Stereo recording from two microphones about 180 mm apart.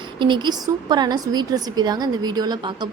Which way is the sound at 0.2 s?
25° right (ahead or behind).